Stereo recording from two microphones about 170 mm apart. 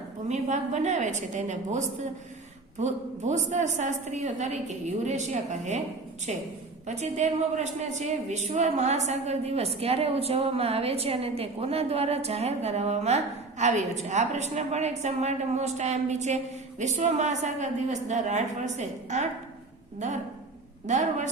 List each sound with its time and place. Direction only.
0.3 s a woman's voice: 45° right (ahead or behind)
2.8 s a woman's voice: 45° right (ahead or behind)
6.8 s a woman's voice: 40° right (ahead or behind)
20.8 s a woman's voice: 45° right (ahead or behind)